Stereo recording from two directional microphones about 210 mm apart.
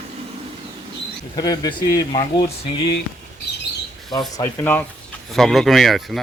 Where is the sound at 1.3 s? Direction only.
20° left (ahead or behind).